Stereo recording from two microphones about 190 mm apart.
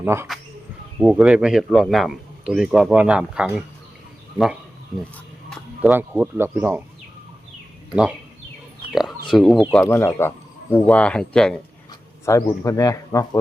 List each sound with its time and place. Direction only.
0.0 s speech: 15° right (ahead or behind)
5.5 s a sound: 5° left (ahead or behind)
5.9 s speech: 10° right (ahead or behind)
8.9 s speech: centre (ahead or behind)
9.8 s speech: 15° left (ahead or behind)
12.2 s speech: 15° left (ahead or behind)